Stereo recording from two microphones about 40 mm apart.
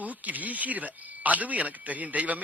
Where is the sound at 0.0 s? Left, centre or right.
Right.